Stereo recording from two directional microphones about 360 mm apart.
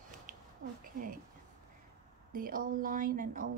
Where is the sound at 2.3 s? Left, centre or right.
Right.